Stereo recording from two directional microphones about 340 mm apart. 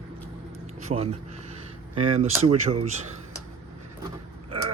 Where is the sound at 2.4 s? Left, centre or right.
Centre.